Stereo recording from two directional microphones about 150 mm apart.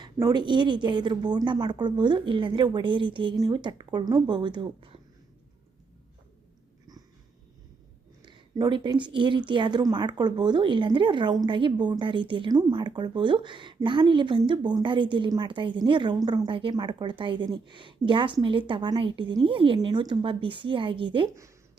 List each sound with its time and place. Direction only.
0.0 s speech: 25° right (ahead or behind)
8.2 s speech: 30° right (ahead or behind)